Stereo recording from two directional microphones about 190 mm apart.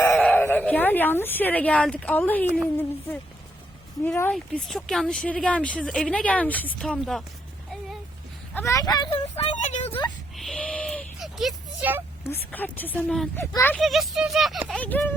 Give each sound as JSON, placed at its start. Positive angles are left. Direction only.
{"t": 0.0, "sound": "speech", "side_deg": 10}
{"t": 8.5, "sound": "speech", "side_deg": 15}
{"t": 9.6, "sound": "speech", "side_deg": 40}
{"t": 10.3, "sound": "a sound", "side_deg": 0}
{"t": 12.2, "sound": "speech", "side_deg": 10}
{"t": 13.7, "sound": "speech", "side_deg": 0}